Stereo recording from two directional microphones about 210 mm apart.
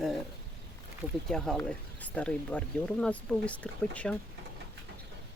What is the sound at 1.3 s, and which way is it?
Speech, centre (ahead or behind).